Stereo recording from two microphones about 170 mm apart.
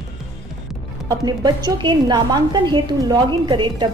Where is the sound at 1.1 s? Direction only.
25° right (ahead or behind).